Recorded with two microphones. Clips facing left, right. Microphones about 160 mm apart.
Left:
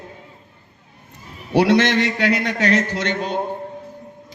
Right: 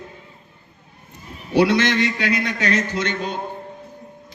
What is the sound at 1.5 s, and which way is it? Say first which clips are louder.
A man's voice: left 2 dB; 75° left (ahead or behind).